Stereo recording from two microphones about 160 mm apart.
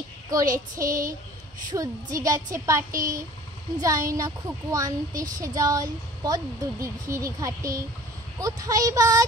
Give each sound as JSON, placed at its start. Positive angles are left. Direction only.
{"t": 0.7, "sound": "speech", "side_deg": -20}